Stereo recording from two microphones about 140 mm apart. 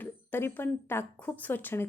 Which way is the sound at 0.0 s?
15° left (ahead or behind).